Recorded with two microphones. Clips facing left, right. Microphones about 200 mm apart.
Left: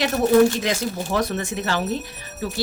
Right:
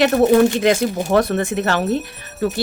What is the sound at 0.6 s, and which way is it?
Speech, 60° right (ahead or behind).